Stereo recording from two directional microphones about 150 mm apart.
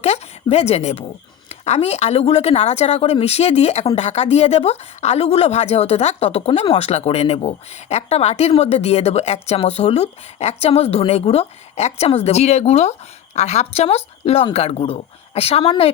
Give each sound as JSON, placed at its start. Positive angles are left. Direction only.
{"t": 0.5, "sound": "speech", "side_deg": 45}